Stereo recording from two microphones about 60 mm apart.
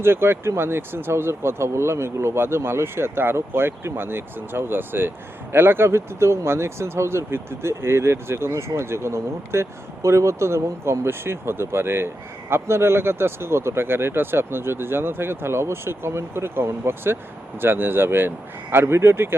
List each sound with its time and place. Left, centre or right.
0.0 s speech: right